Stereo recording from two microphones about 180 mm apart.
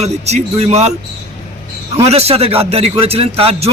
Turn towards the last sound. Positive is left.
turn(degrees=-35)  # may be behind; listen again after turning